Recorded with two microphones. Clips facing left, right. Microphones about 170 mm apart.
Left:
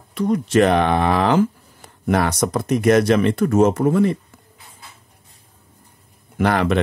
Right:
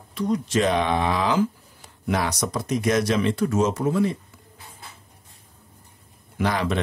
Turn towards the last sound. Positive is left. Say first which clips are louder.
# left 6 dB
turn(degrees=60)  # may be behind; listen again after turning